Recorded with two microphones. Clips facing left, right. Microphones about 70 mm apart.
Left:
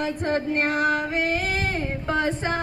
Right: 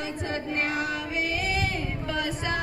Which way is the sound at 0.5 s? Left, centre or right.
Left.